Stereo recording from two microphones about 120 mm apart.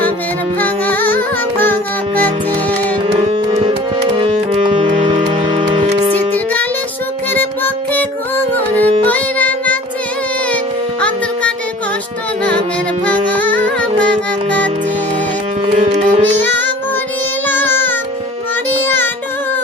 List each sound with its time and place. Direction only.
0.6 s music: 15° left (ahead or behind)
3.1 s music: 55° right (ahead or behind)
6.3 s music: 15° left (ahead or behind)
9.0 s music: 10° left (ahead or behind)
13.1 s music: 15° left (ahead or behind)
15.8 s music: 75° right (ahead or behind)
17.5 s music: 15° left (ahead or behind)